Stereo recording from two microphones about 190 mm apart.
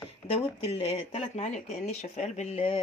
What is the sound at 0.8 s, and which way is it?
Speech, 35° left (ahead or behind).